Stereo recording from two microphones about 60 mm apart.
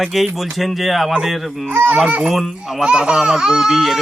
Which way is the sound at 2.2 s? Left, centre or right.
Centre.